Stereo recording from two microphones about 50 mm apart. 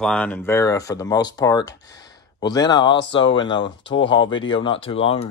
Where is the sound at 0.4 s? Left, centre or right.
Left.